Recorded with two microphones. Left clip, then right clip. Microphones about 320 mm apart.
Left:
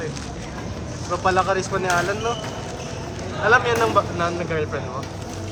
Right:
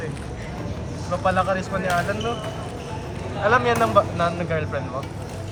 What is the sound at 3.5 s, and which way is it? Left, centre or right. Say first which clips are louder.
Speech: left 1 dB; centre.